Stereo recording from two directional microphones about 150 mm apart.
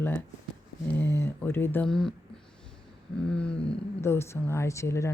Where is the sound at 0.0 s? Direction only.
10° left (ahead or behind).